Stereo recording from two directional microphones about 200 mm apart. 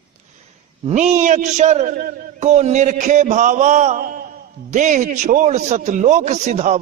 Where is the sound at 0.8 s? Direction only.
35° right (ahead or behind).